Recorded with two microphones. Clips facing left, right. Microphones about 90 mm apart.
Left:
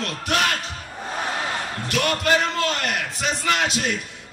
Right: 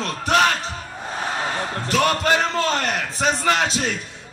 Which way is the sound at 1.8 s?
30° right (ahead or behind).